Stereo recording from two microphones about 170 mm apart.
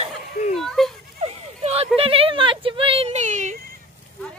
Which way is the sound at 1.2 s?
35° right (ahead or behind).